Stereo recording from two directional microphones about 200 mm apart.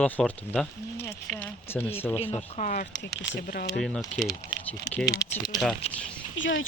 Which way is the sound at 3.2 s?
55° left (ahead or behind).